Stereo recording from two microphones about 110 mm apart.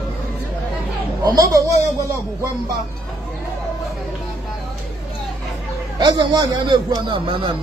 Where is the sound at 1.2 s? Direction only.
35° right (ahead or behind).